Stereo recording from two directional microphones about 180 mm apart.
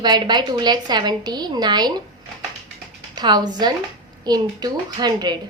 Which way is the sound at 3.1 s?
25° right (ahead or behind).